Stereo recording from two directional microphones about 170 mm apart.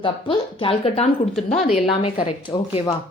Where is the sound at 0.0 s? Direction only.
30° left (ahead or behind).